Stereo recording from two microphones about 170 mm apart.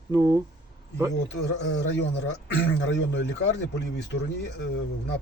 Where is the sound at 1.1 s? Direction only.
90° left.